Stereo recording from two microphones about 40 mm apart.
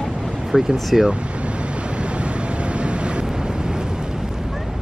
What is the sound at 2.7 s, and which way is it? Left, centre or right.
Vehicle, right.